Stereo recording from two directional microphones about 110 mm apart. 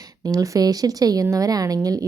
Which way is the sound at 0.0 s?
35° right (ahead or behind).